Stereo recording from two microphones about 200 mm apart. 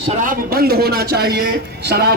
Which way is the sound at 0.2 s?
45° right (ahead or behind).